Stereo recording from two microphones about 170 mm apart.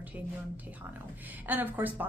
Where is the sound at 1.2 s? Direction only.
10° right (ahead or behind).